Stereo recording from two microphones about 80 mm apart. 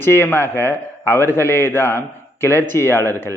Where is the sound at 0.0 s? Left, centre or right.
Left.